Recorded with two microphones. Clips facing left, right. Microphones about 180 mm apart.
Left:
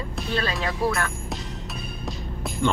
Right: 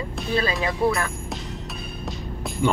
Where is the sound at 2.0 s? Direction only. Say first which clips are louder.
Right 1 dB; centre (ahead or behind).